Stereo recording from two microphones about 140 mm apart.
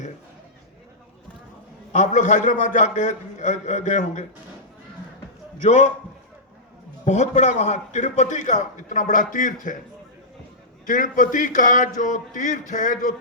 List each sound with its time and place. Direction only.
1.9 s a man's voice: 60° left (ahead or behind)
5.6 s a man's voice: 60° left (ahead or behind)
7.0 s a man's voice: 55° left (ahead or behind)
10.8 s a man's voice: 70° left (ahead or behind)